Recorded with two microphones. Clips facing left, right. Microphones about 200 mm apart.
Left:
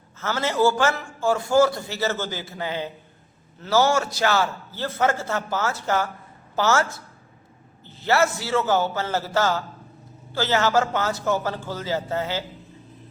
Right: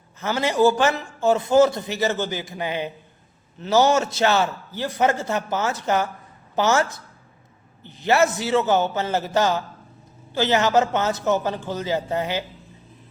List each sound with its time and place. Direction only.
0.2 s a man's voice: 15° right (ahead or behind)